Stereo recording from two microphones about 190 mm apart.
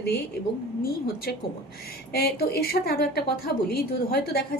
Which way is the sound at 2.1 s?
55° left (ahead or behind).